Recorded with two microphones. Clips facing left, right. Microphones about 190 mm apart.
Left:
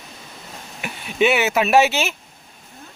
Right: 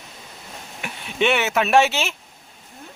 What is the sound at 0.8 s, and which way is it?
Speech, 5° left (ahead or behind).